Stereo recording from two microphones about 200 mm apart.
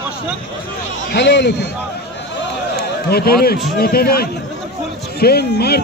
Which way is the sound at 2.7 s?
50° left (ahead or behind).